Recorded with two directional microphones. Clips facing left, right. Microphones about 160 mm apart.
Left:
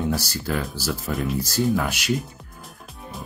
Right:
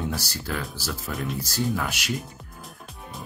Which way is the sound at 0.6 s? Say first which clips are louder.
Left 5 dB; centre (ahead or behind).